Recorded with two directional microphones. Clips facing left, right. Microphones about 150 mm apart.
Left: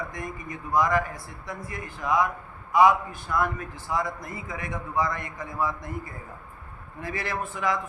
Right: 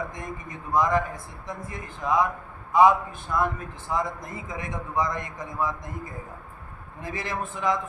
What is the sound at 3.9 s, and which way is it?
A man's voice, 20° right (ahead or behind).